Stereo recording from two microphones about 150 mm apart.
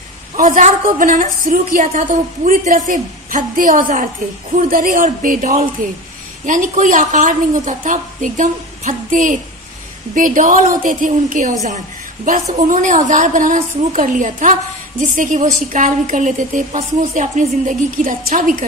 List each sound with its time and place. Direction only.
0.4 s a woman's voice: 60° right (ahead or behind)